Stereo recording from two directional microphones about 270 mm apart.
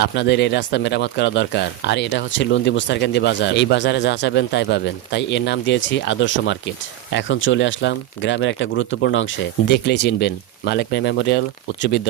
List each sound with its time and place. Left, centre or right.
0.0 s speech: left